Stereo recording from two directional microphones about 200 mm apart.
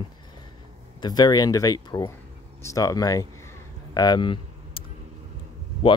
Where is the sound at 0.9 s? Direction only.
20° left (ahead or behind).